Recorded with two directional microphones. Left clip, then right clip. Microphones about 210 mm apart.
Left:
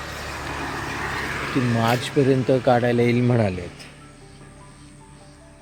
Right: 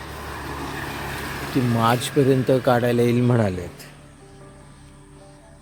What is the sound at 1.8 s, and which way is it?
Speech, 10° right (ahead or behind).